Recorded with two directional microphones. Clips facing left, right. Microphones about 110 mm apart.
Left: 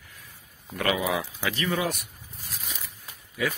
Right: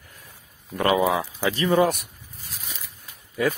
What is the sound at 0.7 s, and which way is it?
Speech, 35° right (ahead or behind).